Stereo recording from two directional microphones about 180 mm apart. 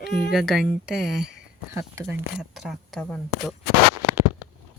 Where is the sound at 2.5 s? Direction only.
Centre (ahead or behind).